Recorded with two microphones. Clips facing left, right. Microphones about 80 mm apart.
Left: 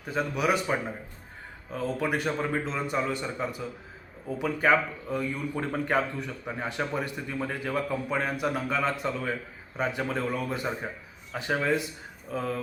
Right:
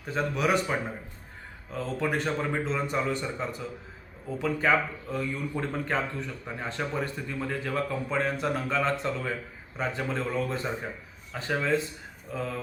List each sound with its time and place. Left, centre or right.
0.0 s speech: centre